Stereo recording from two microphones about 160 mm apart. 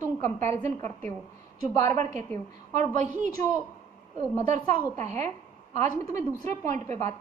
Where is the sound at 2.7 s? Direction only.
50° right (ahead or behind).